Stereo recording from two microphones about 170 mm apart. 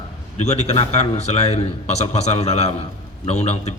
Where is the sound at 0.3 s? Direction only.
40° left (ahead or behind).